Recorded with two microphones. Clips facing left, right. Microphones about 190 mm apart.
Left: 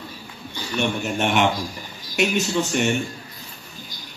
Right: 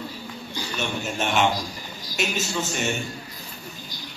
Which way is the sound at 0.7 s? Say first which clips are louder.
Left 5 dB; 65° left (ahead or behind).